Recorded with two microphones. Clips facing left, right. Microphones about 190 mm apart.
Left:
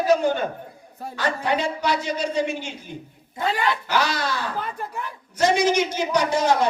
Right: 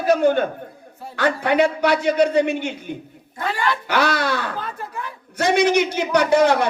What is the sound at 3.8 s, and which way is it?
A man's voice, 60° right (ahead or behind).